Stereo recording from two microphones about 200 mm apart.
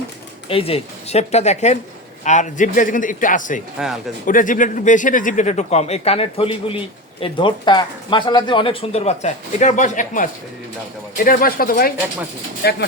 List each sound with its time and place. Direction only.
0.4 s speech: 30° left (ahead or behind)
3.8 s speech: 5° right (ahead or behind)
4.3 s speech: 40° left (ahead or behind)